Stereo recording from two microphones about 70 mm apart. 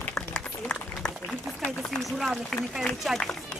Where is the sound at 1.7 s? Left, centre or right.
Centre.